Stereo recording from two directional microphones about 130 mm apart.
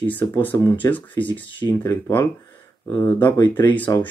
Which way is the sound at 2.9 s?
15° left (ahead or behind).